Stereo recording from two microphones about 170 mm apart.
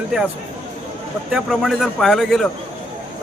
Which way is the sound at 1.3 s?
Centre (ahead or behind).